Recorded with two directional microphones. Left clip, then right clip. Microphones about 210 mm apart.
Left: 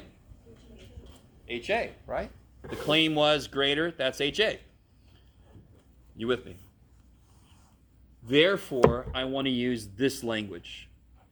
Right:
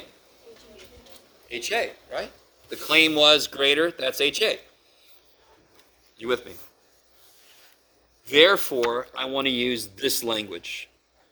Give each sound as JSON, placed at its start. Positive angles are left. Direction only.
{"t": 1.5, "sound": "speech", "side_deg": -40}
{"t": 6.1, "sound": "speech", "side_deg": -45}
{"t": 8.3, "sound": "speech", "side_deg": -45}